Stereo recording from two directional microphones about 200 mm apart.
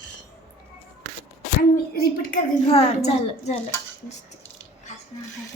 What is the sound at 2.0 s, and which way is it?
Speech, 45° left (ahead or behind).